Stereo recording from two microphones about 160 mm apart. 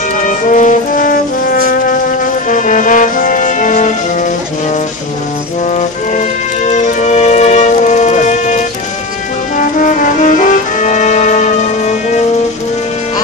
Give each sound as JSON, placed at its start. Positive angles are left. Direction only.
{"t": 0.2, "sound": "music", "side_deg": 55}
{"t": 5.8, "sound": "music", "side_deg": 50}